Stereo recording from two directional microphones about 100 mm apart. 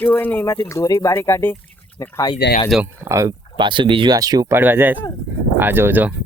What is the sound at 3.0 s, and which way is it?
Speech, 30° right (ahead or behind).